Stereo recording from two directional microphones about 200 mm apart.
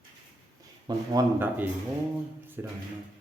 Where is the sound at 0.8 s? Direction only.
20° right (ahead or behind).